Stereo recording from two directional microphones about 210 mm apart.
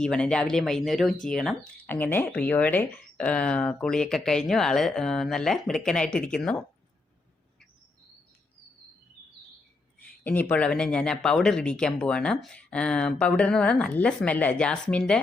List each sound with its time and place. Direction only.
0.0 s speech: 5° left (ahead or behind)
10.2 s speech: 5° left (ahead or behind)